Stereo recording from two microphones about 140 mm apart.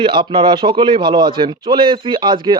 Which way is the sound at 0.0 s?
35° right (ahead or behind).